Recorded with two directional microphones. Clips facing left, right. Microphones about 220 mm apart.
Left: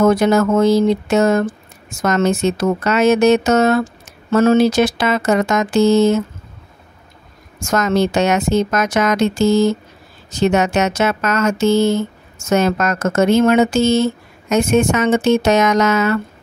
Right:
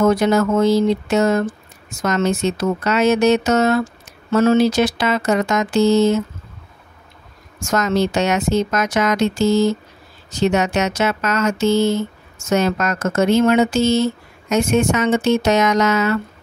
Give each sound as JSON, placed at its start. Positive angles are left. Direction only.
{"t": 0.0, "sound": "speech", "side_deg": 50}
{"t": 7.7, "sound": "speech", "side_deg": 50}